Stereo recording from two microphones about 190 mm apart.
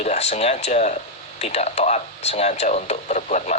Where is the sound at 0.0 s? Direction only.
35° left (ahead or behind).